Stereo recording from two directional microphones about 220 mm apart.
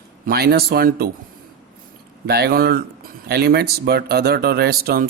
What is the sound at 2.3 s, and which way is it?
Speech, 45° right (ahead or behind).